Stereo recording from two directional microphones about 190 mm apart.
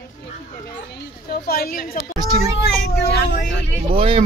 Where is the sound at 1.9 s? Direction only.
25° right (ahead or behind).